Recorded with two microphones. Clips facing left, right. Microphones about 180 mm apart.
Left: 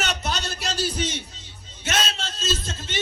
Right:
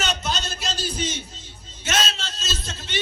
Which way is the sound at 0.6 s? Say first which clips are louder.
Left 4 dB; 70° left (ahead or behind).